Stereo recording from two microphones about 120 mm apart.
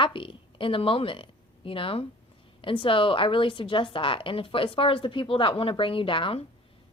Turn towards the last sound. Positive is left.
turn(degrees=45)  # may be behind; listen again after turning